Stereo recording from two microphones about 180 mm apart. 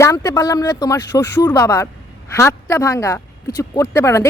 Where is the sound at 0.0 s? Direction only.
20° left (ahead or behind).